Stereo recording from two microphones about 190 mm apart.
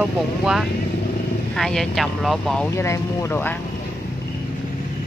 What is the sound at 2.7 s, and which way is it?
Speech, 15° left (ahead or behind).